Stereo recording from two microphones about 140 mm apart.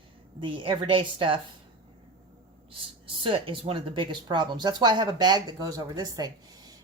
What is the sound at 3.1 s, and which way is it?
Speech, 35° right (ahead or behind).